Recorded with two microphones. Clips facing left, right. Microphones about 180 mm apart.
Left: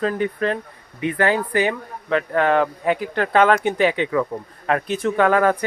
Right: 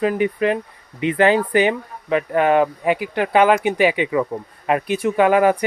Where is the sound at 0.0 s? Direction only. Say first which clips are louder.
Right 3 dB; 15° right (ahead or behind).